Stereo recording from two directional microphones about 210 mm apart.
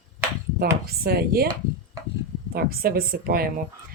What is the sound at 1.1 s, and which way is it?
Speech, 50° right (ahead or behind).